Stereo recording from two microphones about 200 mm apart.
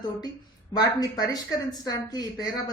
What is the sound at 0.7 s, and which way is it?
Speech, 20° left (ahead or behind).